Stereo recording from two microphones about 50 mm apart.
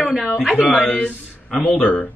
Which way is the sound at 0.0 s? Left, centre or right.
Centre.